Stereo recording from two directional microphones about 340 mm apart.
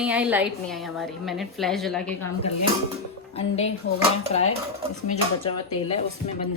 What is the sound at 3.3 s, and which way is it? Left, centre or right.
Speech, centre.